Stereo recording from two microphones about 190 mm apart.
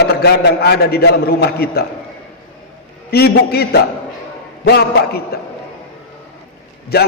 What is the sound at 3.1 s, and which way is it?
A man's voice, 55° left (ahead or behind).